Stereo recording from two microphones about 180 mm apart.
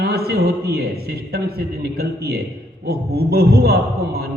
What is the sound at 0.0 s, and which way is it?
A man's voice, 60° right (ahead or behind).